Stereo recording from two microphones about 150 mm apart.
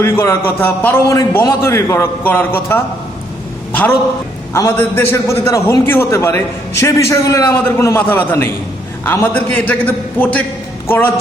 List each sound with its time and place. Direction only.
0.0 s a man's voice: 15° left (ahead or behind)